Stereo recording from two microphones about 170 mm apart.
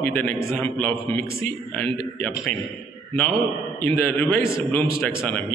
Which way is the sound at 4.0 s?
10° left (ahead or behind).